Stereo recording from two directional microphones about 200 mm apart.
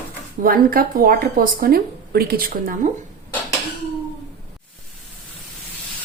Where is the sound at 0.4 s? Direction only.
45° right (ahead or behind).